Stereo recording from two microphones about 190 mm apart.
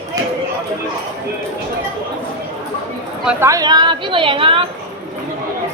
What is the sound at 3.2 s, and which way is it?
Speech, 5° right (ahead or behind).